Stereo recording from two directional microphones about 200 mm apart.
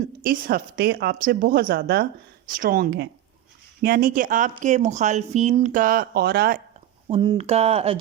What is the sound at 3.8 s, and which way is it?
Speech, 45° right (ahead or behind).